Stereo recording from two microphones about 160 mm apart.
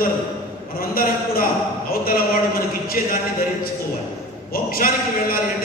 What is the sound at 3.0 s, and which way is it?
Speech, 60° left (ahead or behind).